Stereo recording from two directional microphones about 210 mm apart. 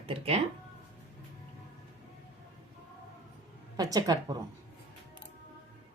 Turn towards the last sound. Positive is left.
turn(degrees=-15)  # may be behind; listen again after turning